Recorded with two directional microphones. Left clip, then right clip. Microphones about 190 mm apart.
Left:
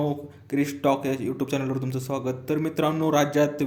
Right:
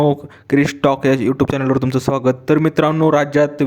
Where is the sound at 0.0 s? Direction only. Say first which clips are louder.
Right 12 dB; 45° right (ahead or behind).